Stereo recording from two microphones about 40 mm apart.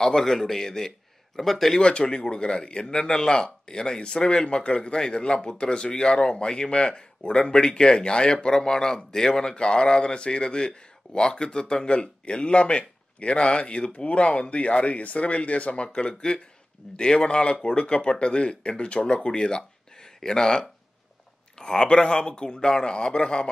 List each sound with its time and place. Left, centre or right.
0.0 s a man's voice: centre
1.8 s speech: left